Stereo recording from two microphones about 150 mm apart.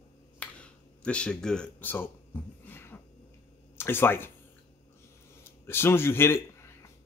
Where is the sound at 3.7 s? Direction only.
15° left (ahead or behind).